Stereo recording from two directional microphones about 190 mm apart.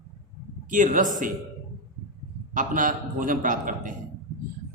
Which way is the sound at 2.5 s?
45° right (ahead or behind).